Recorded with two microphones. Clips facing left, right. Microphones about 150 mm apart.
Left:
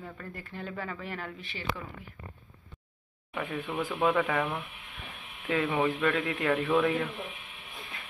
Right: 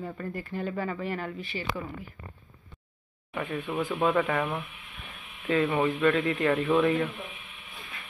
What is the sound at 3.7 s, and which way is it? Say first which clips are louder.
Speech: right 4 dB; 15° right (ahead or behind).